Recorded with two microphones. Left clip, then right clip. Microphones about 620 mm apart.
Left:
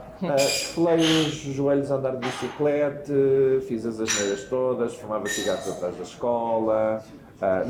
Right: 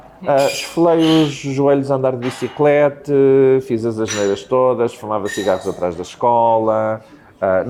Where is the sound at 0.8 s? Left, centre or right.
Right.